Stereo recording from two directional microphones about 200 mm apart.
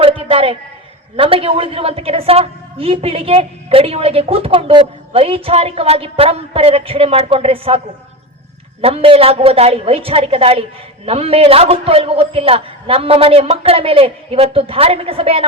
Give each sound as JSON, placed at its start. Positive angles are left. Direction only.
{"t": 0.0, "sound": "a sound", "side_deg": -30}
{"t": 1.1, "sound": "a woman's voice", "side_deg": -30}
{"t": 8.8, "sound": "a woman's voice", "side_deg": -30}